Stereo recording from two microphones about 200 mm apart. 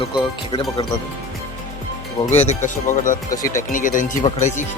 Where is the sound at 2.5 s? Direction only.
35° left (ahead or behind).